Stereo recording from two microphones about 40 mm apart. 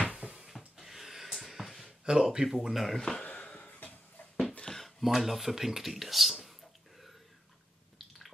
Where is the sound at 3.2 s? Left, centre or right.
Left.